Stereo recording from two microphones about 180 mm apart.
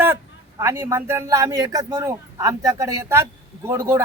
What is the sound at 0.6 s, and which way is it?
Speech, 15° right (ahead or behind).